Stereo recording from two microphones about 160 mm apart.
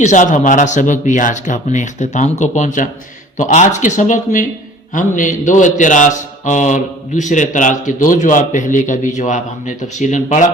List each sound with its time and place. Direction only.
0.0 s a man's voice: 50° left (ahead or behind)